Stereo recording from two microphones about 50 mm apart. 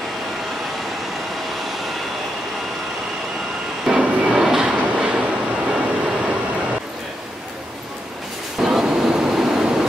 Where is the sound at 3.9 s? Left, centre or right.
Centre.